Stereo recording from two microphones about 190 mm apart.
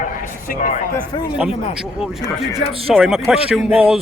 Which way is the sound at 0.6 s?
40° left (ahead or behind).